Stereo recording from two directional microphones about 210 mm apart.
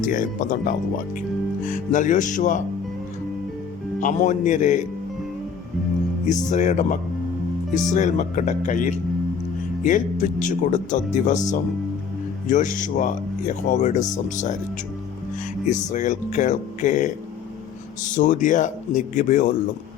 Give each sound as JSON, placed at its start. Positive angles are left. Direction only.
{"t": 0.0, "sound": "speech", "side_deg": 40}
{"t": 4.0, "sound": "speech", "side_deg": 35}
{"t": 6.2, "sound": "speech", "side_deg": 35}
{"t": 12.5, "sound": "speech", "side_deg": 40}
{"t": 15.7, "sound": "speech", "side_deg": 35}